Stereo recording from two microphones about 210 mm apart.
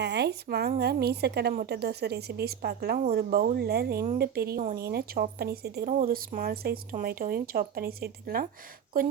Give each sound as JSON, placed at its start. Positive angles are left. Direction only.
{"t": 0.0, "sound": "speech", "side_deg": -55}